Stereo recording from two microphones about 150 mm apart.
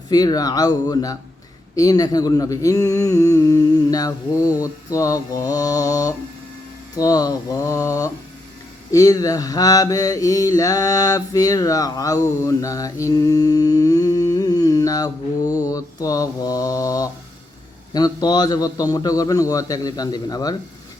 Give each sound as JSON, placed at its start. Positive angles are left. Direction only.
{"t": 0.1, "sound": "mantra", "side_deg": 25}